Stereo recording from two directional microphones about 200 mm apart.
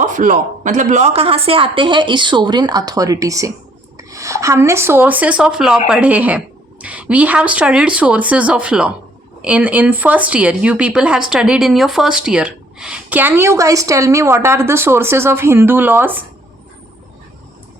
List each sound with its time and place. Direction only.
0.0 s a woman's voice: 40° right (ahead or behind); by 16.2 s 10° right (ahead or behind)